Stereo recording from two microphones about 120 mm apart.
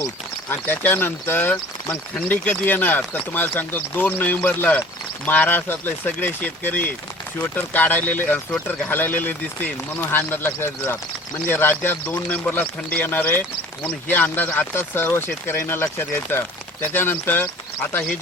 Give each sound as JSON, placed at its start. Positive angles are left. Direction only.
{"t": 0.5, "sound": "speech", "side_deg": 15}